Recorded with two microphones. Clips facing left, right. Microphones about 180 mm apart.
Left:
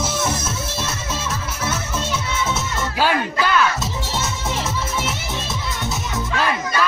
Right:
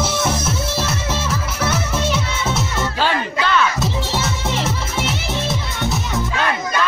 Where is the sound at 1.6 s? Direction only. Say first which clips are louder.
Right 5 dB; 70° right (ahead or behind).